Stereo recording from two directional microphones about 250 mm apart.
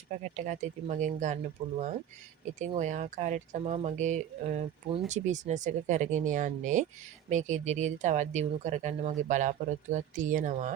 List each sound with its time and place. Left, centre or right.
0.3 s speech: right
2.4 s speech: right